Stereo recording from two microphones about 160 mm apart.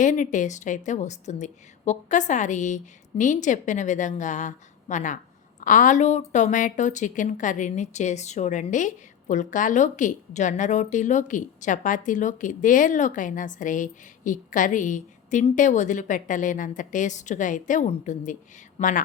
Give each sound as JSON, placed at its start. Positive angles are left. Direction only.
{"t": 0.0, "sound": "a woman's voice", "side_deg": 50}